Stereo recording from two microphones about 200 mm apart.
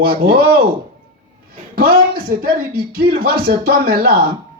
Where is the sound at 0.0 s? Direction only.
50° right (ahead or behind).